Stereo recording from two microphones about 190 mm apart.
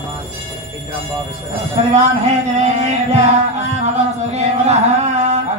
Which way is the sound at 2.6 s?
35° right (ahead or behind).